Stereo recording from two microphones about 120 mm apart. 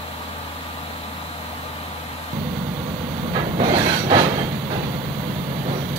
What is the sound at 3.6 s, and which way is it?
Train, 45° right (ahead or behind).